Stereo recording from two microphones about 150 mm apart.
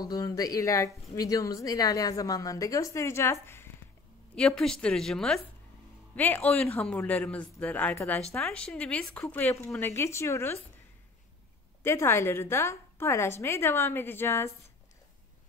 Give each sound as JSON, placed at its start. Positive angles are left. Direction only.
{"t": 0.0, "sound": "speech", "side_deg": 25}
{"t": 4.4, "sound": "a woman's voice", "side_deg": 5}
{"t": 11.8, "sound": "speech", "side_deg": 15}